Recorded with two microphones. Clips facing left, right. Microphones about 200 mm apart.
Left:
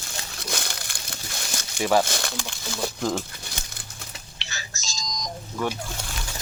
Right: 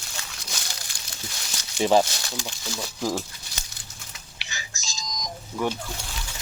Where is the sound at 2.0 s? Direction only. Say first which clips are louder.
Left 3 dB; 55° left (ahead or behind).